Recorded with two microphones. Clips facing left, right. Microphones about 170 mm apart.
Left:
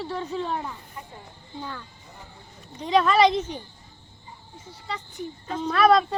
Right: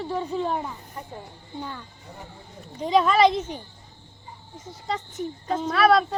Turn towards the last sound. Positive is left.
turn(degrees=-5)  # may be behind; listen again after turning